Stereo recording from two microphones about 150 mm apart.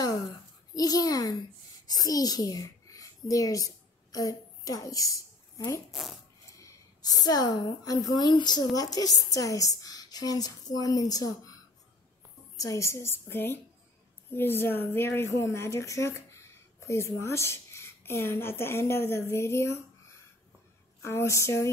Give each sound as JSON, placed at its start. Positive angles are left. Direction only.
{"t": 0.7, "sound": "a child's voice", "side_deg": 25}
{"t": 5.9, "sound": "speech", "side_deg": 0}
{"t": 6.5, "sound": "a woman's voice", "side_deg": 20}